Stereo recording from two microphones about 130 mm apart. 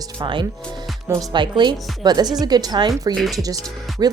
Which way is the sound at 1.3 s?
35° right (ahead or behind).